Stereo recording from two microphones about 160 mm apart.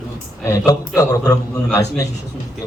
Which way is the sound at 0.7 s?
20° left (ahead or behind).